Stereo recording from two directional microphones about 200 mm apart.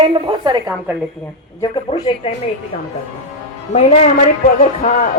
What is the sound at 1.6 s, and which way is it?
Speech, 25° left (ahead or behind).